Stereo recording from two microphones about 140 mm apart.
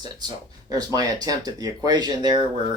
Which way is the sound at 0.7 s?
25° right (ahead or behind).